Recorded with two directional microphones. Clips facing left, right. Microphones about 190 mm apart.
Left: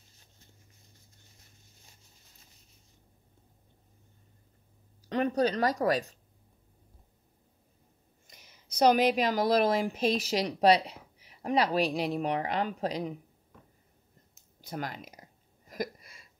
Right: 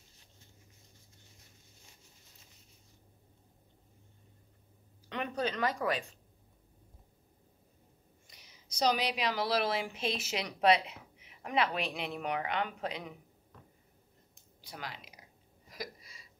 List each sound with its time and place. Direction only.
5.1 s speech: 40° left (ahead or behind)
8.3 s a woman's voice: 50° left (ahead or behind); by 13.1 s 35° left (ahead or behind)
14.6 s speech: 45° left (ahead or behind)
15.7 s a sound: 50° left (ahead or behind)